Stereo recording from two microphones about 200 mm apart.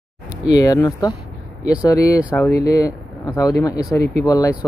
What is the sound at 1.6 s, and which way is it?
Speech, 5° right (ahead or behind).